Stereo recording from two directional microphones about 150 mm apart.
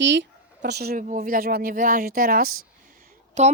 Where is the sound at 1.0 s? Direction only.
65° right (ahead or behind).